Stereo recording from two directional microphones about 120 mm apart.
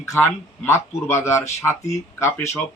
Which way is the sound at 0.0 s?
20° left (ahead or behind).